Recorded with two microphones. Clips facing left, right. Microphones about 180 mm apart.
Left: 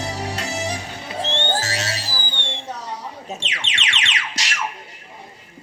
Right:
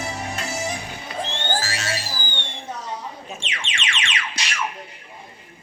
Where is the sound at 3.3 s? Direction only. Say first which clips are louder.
Left 2 dB; 40° left (ahead or behind).